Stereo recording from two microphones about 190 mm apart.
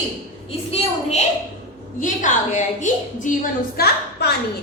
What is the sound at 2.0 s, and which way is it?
A woman's voice, 40° left (ahead or behind).